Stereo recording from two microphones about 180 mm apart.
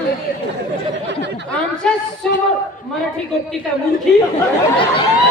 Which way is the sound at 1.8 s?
5° left (ahead or behind).